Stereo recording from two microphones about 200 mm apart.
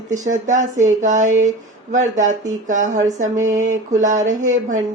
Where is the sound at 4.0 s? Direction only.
40° right (ahead or behind).